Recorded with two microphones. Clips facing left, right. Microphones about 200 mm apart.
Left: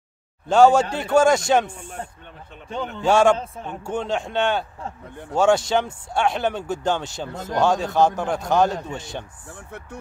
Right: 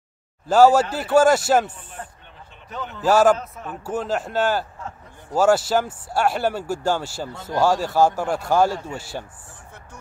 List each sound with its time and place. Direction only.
0.5 s a man's voice: 5° right (ahead or behind)
2.0 s speech: 30° left (ahead or behind)
3.0 s a man's voice: 5° right (ahead or behind)
3.3 s a man's voice: 30° left (ahead or behind)
3.8 s a man's voice: 5° right (ahead or behind)
9.5 s speech: 65° left (ahead or behind)